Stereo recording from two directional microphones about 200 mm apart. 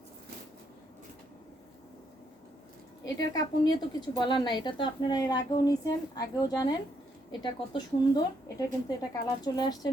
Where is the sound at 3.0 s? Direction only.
20° left (ahead or behind).